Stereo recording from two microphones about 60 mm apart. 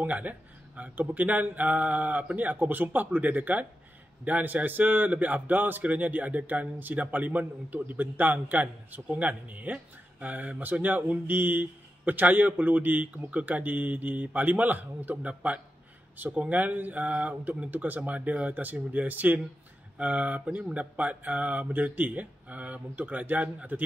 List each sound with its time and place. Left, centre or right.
0.0 s a man's voice: right